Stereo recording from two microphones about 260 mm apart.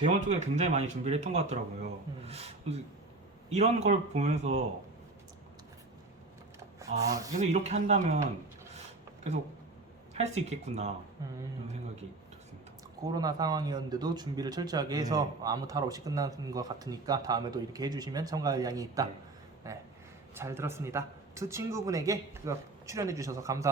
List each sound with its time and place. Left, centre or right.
0.0 s speech: right
6.7 s speech: centre
7.3 s speech: right
10.2 s speech: right
13.1 s a man's voice: centre